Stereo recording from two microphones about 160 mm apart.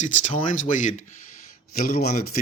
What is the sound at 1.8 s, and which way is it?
Speech, 65° left (ahead or behind).